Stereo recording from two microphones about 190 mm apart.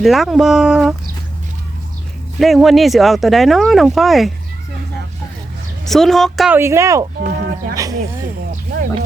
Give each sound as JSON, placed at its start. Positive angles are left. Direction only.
{"t": 0.0, "sound": "speech", "side_deg": 0}
{"t": 2.4, "sound": "speech", "side_deg": 0}
{"t": 5.8, "sound": "speech", "side_deg": 0}
{"t": 6.6, "sound": "speech", "side_deg": -15}
{"t": 7.3, "sound": "a sound", "side_deg": -50}